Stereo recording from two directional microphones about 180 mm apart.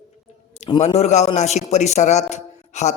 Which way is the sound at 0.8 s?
40° left (ahead or behind).